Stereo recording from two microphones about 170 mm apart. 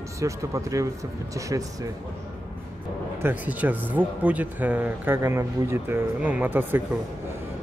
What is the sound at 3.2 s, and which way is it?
Speech, 10° right (ahead or behind).